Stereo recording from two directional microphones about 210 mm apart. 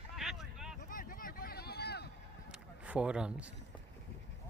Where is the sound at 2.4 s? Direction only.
5° right (ahead or behind).